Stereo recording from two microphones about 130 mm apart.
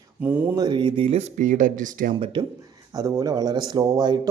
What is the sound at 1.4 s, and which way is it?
Speech, 80° right.